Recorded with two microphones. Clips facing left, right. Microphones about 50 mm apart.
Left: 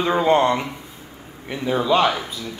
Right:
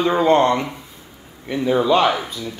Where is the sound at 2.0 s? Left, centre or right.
Centre.